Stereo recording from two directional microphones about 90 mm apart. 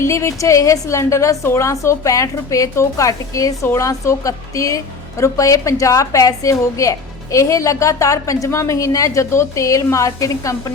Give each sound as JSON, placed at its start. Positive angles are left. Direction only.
{"t": 0.0, "sound": "a woman's voice", "side_deg": 30}